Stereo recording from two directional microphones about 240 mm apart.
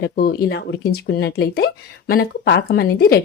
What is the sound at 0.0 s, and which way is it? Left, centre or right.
Speech, left.